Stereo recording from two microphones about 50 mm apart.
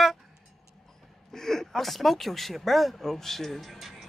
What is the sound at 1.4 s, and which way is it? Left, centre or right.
Speech, centre.